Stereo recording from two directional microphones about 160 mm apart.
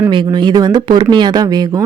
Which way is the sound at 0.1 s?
30° right (ahead or behind).